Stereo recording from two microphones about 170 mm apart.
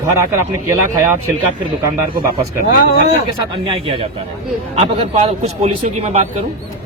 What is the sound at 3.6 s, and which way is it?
A man's voice, 30° right (ahead or behind).